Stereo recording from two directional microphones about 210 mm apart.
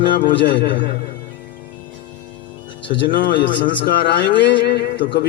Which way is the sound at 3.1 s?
40° left (ahead or behind).